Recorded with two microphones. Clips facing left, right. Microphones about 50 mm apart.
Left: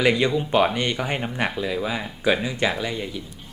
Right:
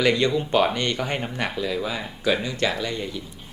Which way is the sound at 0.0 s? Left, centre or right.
Centre.